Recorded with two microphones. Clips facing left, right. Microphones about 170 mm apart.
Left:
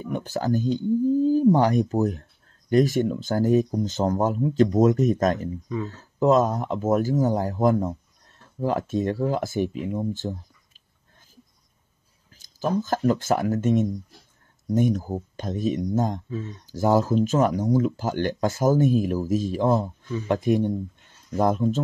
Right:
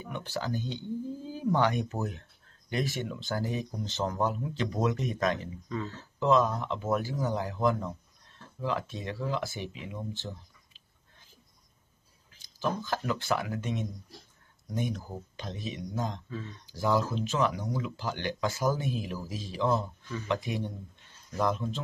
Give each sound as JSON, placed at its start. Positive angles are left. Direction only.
{"t": 0.0, "sound": "speech", "side_deg": 45}
{"t": 12.4, "sound": "speech", "side_deg": 45}